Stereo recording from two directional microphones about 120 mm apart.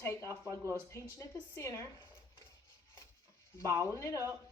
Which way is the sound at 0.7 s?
25° left (ahead or behind).